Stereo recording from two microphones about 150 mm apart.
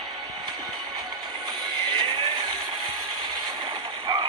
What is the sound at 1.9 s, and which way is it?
Music, 35° right (ahead or behind).